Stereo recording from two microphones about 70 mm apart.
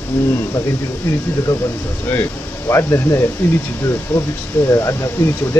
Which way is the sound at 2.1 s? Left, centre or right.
Left.